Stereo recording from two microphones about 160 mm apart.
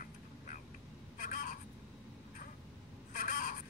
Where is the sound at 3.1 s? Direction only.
55° left (ahead or behind).